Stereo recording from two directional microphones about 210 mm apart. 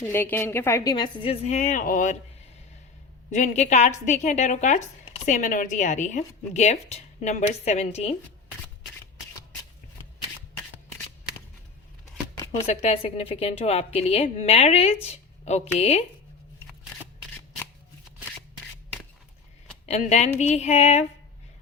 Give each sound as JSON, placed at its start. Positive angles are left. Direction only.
{"t": 0.1, "sound": "speech", "side_deg": 10}
{"t": 3.3, "sound": "speech", "side_deg": 35}
{"t": 12.5, "sound": "speech", "side_deg": 35}
{"t": 19.8, "sound": "speech", "side_deg": 30}